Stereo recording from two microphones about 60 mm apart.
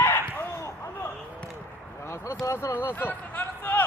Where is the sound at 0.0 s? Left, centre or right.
Left.